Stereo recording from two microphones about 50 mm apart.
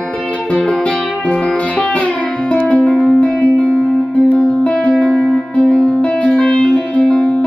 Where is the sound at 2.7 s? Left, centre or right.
Centre.